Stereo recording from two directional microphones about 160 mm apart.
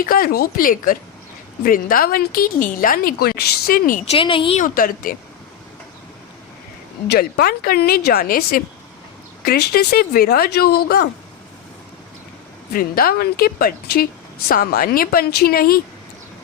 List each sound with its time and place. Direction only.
0.0 s a woman's voice: 65° left (ahead or behind)
4.0 s speech: 35° left (ahead or behind)
4.6 s a woman's voice: 60° left (ahead or behind)
7.1 s a woman's voice: 70° left (ahead or behind)
12.7 s a woman's voice: 70° left (ahead or behind)